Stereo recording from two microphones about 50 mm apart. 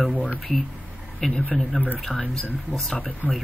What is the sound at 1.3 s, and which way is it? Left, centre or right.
Speech, left.